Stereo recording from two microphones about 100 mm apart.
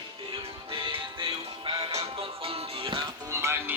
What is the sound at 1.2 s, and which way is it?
Music, 60° right (ahead or behind).